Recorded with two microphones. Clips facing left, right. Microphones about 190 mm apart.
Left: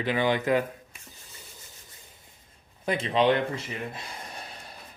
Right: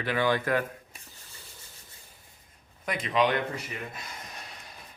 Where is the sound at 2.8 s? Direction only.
30° left (ahead or behind).